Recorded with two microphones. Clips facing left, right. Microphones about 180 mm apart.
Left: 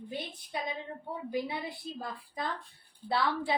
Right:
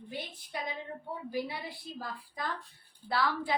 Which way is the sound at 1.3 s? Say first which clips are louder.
Left 2 dB; 20° left (ahead or behind).